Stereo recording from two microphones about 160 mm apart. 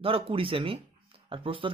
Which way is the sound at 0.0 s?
35° right (ahead or behind).